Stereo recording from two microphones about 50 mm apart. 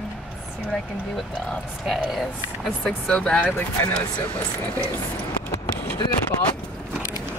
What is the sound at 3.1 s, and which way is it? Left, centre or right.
Speech, left.